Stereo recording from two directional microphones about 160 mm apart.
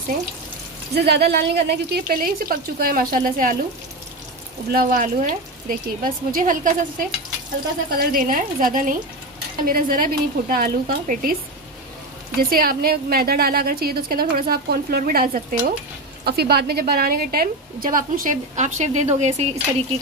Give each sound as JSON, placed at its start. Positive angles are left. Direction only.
{"t": 0.9, "sound": "speech", "side_deg": -90}
{"t": 4.6, "sound": "speech", "side_deg": -65}
{"t": 12.4, "sound": "a woman's voice", "side_deg": -65}
{"t": 16.3, "sound": "a woman's voice", "side_deg": -80}